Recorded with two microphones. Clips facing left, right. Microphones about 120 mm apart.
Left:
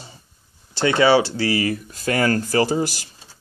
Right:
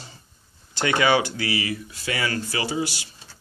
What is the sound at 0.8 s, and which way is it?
Speech, 30° left (ahead or behind).